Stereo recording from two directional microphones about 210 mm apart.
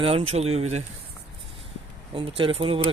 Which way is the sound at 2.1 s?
25° right (ahead or behind).